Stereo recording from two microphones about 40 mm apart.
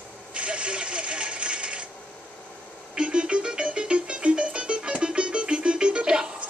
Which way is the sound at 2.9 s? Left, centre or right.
Right.